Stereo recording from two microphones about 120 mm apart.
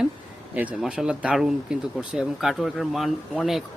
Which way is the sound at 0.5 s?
10° right (ahead or behind).